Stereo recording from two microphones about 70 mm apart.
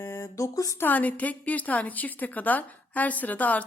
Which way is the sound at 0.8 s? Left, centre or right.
Left.